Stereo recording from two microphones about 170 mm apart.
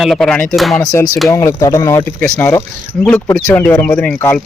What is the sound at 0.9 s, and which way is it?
Speech, 20° left (ahead or behind).